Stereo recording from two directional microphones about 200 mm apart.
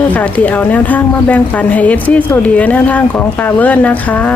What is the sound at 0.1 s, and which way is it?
Speech, 10° left (ahead or behind).